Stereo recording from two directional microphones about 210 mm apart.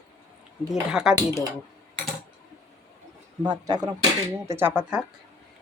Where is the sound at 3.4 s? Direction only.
20° right (ahead or behind).